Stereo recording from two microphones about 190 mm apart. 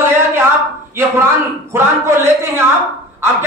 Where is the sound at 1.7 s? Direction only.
15° right (ahead or behind).